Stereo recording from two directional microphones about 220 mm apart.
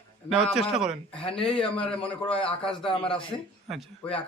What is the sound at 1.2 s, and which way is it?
Speech, 25° left (ahead or behind).